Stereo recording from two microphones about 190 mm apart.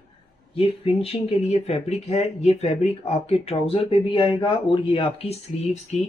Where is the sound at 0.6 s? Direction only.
30° left (ahead or behind).